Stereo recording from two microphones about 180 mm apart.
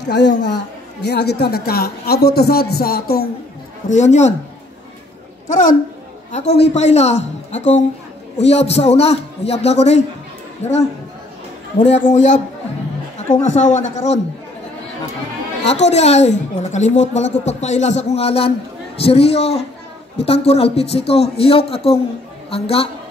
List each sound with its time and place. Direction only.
0.1 s a woman's voice: 75° left (ahead or behind)
1.0 s a man's voice: 65° left (ahead or behind)
3.9 s a woman's voice: 40° left (ahead or behind)
5.5 s a woman's voice: 45° left (ahead or behind)
6.3 s a woman's voice: 35° left (ahead or behind)
12.0 s a woman's voice: 40° left (ahead or behind)
13.4 s a woman's voice: 40° left (ahead or behind)
15.8 s a woman's voice: 35° left (ahead or behind)